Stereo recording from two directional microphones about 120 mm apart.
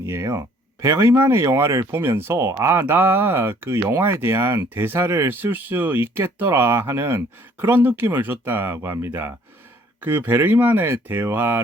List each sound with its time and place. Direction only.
0.0 s speech: 25° right (ahead or behind)